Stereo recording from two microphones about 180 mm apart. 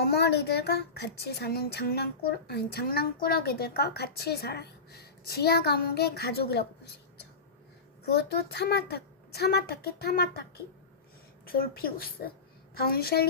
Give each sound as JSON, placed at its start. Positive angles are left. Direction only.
{"t": 0.0, "sound": "speech", "side_deg": 65}
{"t": 8.0, "sound": "speech", "side_deg": 65}
{"t": 11.4, "sound": "speech", "side_deg": 55}